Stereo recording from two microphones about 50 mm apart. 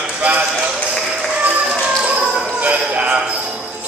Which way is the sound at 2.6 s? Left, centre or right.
Right.